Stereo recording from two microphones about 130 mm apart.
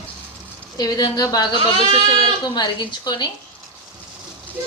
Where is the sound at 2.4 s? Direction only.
35° left (ahead or behind).